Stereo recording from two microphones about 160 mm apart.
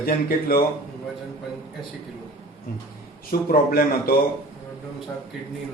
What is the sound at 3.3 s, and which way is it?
Speech, 65° left (ahead or behind).